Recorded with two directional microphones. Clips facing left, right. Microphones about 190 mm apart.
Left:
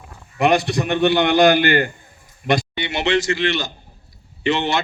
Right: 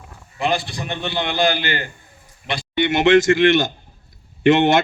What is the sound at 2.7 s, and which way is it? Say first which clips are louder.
A man's voice: right 6 dB; 50° right (ahead or behind).